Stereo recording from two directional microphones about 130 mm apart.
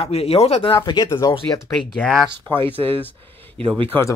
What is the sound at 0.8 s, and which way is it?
Speech, 35° left (ahead or behind).